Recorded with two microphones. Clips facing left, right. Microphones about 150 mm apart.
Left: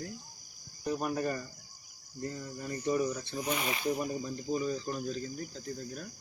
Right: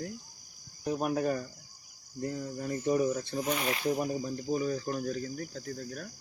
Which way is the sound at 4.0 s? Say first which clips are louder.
Right 3 dB; 10° right (ahead or behind).